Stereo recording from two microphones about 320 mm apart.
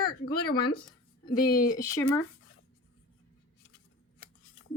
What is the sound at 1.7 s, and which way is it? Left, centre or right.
Speech, centre.